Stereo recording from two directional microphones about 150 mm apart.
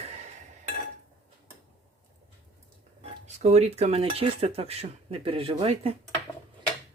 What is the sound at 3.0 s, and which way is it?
Speech, 45° right (ahead or behind).